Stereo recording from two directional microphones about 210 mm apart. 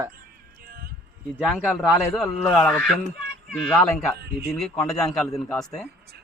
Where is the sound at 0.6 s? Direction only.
45° right (ahead or behind).